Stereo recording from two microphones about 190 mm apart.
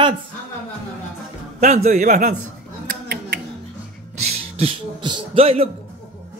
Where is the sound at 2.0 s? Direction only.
55° right (ahead or behind).